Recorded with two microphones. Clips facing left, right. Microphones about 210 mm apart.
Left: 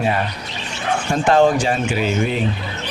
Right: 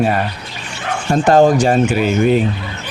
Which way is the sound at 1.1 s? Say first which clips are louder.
Right 4 dB; 40° right (ahead or behind).